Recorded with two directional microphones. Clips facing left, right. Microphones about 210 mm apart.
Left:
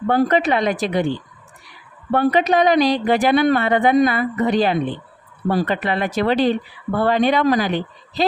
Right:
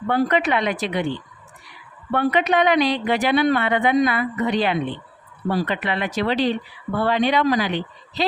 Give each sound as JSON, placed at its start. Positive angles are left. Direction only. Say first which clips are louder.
{"t": 0.1, "sound": "speech", "louder": "left 3 dB", "side_deg": 40}